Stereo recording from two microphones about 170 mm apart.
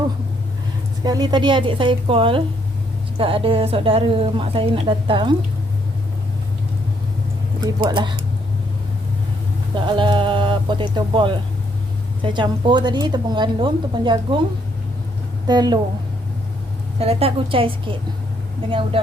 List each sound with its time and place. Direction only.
1.0 s a woman's voice: 25° right (ahead or behind)
7.8 s a woman's voice: 30° right (ahead or behind)
9.7 s a woman's voice: 30° right (ahead or behind)
15.4 s a woman's voice: 25° right (ahead or behind)
17.0 s a woman's voice: 35° right (ahead or behind)